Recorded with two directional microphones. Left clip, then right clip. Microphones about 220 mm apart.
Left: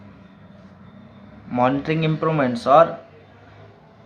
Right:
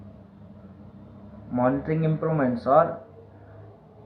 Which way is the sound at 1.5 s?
45° left (ahead or behind).